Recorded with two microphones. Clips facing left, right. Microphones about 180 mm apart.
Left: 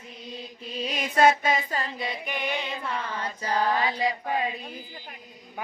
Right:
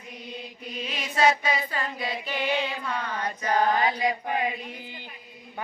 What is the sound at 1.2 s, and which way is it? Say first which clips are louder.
Child singing: left 2 dB; 50° left (ahead or behind).